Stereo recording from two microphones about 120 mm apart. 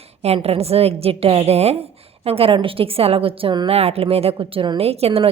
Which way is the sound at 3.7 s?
60° right (ahead or behind).